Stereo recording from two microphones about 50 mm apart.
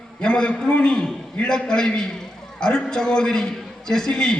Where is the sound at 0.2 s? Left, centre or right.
Centre.